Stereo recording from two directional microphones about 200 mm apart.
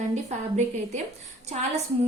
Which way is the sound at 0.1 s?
35° right (ahead or behind).